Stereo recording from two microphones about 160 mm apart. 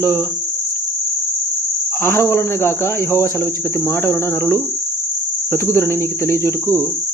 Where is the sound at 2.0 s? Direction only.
15° left (ahead or behind).